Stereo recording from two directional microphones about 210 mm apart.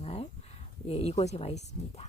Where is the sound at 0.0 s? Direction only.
30° left (ahead or behind).